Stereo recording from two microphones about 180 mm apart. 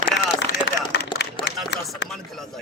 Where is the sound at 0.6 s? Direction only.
70° left (ahead or behind).